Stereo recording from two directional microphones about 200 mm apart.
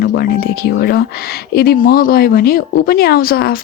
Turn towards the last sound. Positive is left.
turn(degrees=50)  # may be behind; listen again after turning